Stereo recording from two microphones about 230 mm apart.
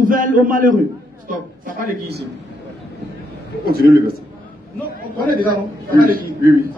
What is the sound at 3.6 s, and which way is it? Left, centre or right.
Speech, right.